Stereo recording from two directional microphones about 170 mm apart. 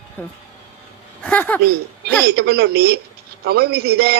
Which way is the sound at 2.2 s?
75° right (ahead or behind).